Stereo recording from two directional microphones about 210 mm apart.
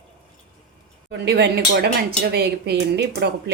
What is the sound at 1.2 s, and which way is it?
Speech, 50° right (ahead or behind).